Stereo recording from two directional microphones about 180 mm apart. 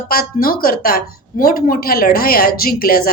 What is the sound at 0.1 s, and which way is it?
A woman's voice, 55° left (ahead or behind).